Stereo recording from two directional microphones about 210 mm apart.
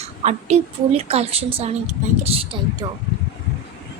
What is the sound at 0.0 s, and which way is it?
A woman's voice, 30° right (ahead or behind).